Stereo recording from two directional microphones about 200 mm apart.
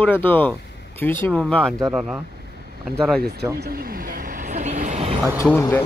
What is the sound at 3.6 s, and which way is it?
Vehicle, 45° right (ahead or behind).